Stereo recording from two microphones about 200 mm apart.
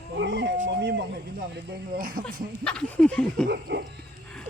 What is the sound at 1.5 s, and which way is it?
Speech, 45° right (ahead or behind).